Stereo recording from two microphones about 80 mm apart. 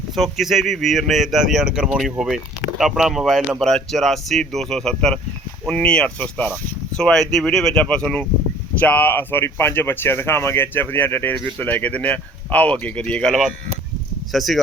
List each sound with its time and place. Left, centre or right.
0.2 s speech: centre
14.3 s speech: centre